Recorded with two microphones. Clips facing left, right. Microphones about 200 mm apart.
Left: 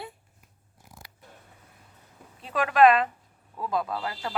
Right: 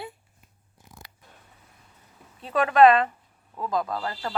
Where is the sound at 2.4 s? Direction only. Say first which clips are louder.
Right 3 dB; centre (ahead or behind).